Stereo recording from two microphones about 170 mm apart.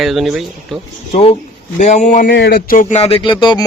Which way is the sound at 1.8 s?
45° left (ahead or behind).